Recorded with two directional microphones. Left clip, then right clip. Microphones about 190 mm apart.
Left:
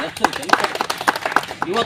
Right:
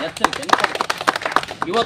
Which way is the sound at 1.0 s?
30° right (ahead or behind).